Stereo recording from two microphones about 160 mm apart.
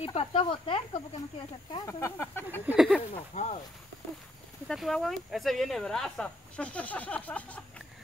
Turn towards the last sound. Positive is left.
turn(degrees=10)  # may be behind; listen again after turning